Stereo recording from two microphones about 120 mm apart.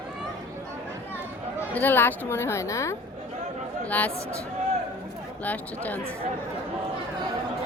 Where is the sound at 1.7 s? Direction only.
15° left (ahead or behind).